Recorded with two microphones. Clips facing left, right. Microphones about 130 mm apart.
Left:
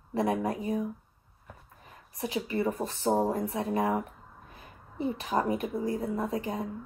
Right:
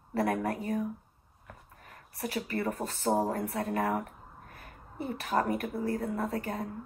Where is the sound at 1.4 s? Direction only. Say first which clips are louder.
Even; 15° left (ahead or behind).